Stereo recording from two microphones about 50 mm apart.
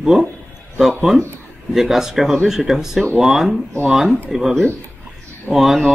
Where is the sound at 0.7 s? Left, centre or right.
Centre.